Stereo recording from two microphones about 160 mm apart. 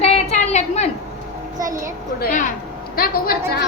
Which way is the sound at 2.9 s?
70° left (ahead or behind).